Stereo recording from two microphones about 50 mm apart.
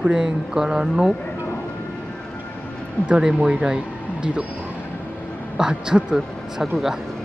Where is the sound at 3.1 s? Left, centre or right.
Centre.